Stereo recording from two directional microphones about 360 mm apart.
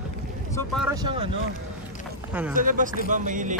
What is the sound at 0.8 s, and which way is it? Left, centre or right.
Speech, centre.